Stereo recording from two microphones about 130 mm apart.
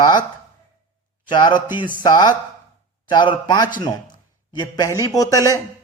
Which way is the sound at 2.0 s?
30° left (ahead or behind).